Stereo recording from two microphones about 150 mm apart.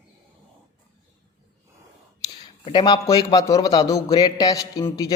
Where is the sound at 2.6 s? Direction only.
30° left (ahead or behind).